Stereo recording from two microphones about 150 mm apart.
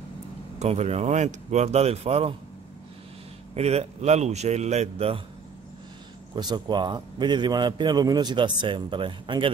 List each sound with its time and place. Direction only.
0.6 s speech: 45° right (ahead or behind)
3.5 s speech: 45° right (ahead or behind)
6.3 s a man's voice: 30° right (ahead or behind)